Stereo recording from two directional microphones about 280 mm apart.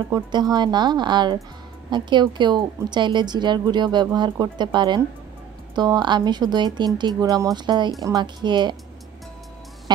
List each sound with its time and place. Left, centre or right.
0.1 s a woman's voice: centre
9.9 s music: centre